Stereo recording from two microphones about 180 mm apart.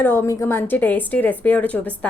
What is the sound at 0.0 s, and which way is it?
A woman's voice, 15° left (ahead or behind).